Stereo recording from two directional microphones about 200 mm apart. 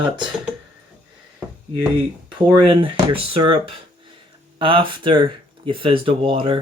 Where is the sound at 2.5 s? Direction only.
25° right (ahead or behind).